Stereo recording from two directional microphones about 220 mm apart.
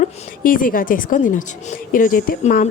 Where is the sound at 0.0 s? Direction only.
40° left (ahead or behind).